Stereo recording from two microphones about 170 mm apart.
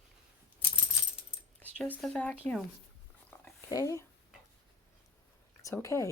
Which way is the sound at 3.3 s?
10° left (ahead or behind).